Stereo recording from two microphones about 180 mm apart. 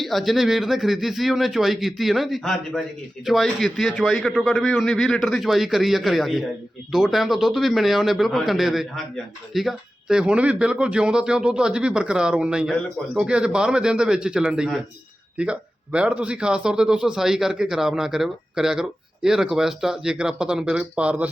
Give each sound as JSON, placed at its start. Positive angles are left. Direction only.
{"t": 0.0, "sound": "speech", "side_deg": 0}